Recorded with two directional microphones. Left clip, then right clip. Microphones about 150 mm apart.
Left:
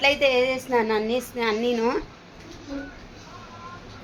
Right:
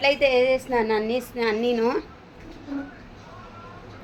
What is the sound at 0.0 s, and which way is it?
A woman's voice, 10° left (ahead or behind).